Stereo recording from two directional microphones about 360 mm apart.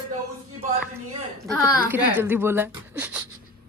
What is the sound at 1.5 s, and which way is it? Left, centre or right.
Speech, centre.